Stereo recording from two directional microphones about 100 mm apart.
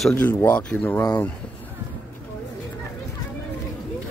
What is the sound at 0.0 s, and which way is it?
Speech, 15° left (ahead or behind).